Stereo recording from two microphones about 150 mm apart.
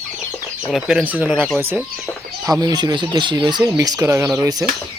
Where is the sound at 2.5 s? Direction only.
25° right (ahead or behind).